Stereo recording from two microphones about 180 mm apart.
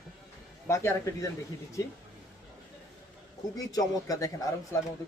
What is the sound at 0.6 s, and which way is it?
Speech, 15° left (ahead or behind).